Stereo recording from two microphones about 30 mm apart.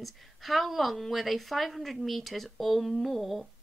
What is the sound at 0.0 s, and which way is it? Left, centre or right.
A woman's voice, centre.